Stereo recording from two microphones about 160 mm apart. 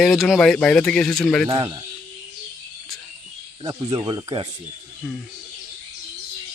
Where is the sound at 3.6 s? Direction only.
25° right (ahead or behind).